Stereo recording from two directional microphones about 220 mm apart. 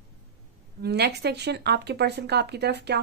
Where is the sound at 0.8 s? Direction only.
45° right (ahead or behind).